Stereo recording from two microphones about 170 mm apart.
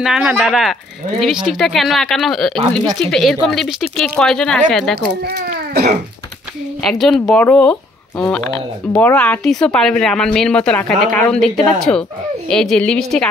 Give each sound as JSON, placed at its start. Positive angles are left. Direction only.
{"t": 0.0, "sound": "speech", "side_deg": -5}
{"t": 4.9, "sound": "a child's voice", "side_deg": -75}
{"t": 6.9, "sound": "speech", "side_deg": 0}